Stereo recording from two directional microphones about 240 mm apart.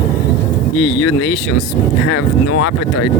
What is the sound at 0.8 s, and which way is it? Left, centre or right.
Speech, left.